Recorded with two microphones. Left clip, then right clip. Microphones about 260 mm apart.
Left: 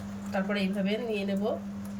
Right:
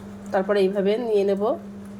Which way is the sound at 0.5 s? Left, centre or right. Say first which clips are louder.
Right 13 dB; centre.